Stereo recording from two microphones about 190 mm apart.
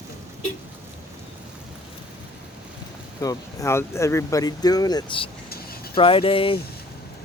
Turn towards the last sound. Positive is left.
turn(degrees=30)  # may be behind; listen again after turning